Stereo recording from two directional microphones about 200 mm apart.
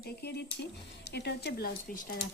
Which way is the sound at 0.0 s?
55° left (ahead or behind).